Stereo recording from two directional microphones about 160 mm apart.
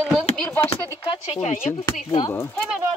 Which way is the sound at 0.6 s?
40° left (ahead or behind).